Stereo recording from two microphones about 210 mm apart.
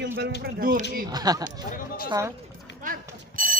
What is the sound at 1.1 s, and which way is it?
Speech, 20° right (ahead or behind).